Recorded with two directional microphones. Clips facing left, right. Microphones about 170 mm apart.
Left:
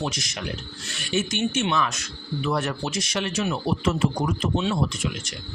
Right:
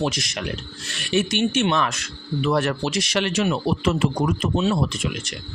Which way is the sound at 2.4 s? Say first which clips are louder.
Right 5 dB; 70° right (ahead or behind).